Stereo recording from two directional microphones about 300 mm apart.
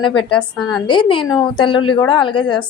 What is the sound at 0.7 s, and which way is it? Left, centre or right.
A woman's voice, centre.